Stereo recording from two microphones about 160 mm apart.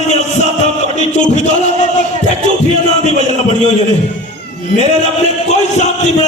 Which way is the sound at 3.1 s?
45° left (ahead or behind).